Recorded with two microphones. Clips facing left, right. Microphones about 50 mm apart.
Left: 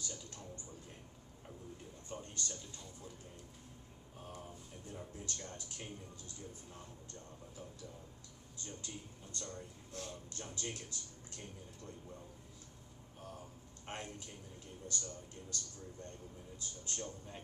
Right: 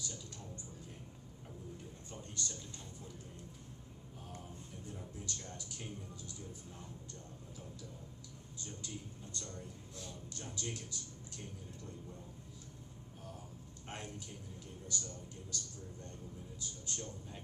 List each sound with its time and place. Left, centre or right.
2.0 s speech: left
4.9 s speech: left
8.6 s speech: left
9.9 s a man's voice: left
10.4 s speech: left
13.8 s speech: left